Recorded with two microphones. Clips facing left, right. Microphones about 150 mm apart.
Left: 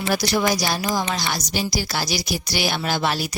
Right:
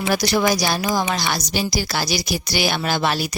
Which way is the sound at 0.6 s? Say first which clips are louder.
Right 2 dB; 80° right.